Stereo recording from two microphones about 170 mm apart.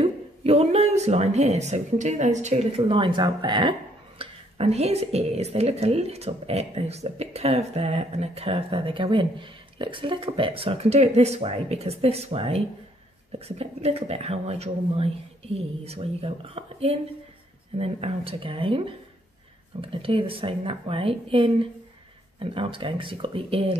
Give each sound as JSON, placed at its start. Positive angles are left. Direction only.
{"t": 0.0, "sound": "a woman's voice", "side_deg": -35}
{"t": 2.8, "sound": "speech", "side_deg": -30}
{"t": 4.2, "sound": "a woman's voice", "side_deg": -35}